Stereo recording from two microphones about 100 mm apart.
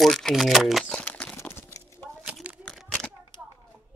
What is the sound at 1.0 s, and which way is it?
Crumpling, 15° left (ahead or behind).